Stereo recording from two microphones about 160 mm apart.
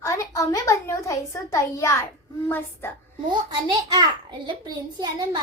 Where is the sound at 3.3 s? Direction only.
30° right (ahead or behind).